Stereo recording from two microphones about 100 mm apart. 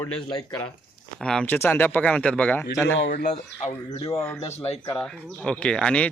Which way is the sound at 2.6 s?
25° left (ahead or behind).